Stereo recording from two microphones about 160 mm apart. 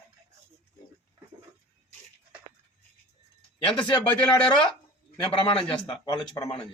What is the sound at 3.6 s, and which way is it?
Speech, 35° left (ahead or behind).